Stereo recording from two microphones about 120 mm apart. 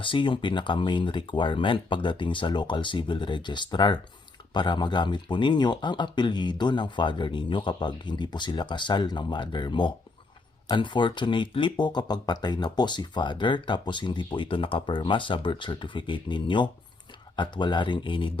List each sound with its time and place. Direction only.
0.0 s speech: 45° left (ahead or behind)